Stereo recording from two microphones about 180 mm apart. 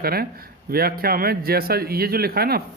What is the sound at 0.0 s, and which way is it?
A man's voice, 55° right (ahead or behind).